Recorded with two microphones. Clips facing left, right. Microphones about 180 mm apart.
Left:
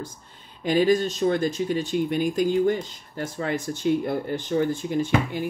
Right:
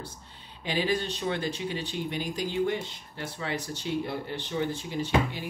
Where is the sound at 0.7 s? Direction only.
45° left (ahead or behind).